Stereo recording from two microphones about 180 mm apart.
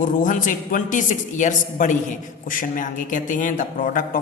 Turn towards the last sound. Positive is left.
turn(degrees=50)  # may be behind; listen again after turning